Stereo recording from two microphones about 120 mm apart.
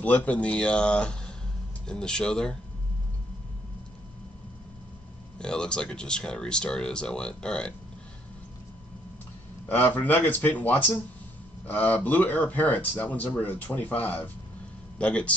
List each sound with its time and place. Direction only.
0.0 s speech: 15° left (ahead or behind)
5.4 s speech: 5° left (ahead or behind)
9.7 s speech: 15° left (ahead or behind)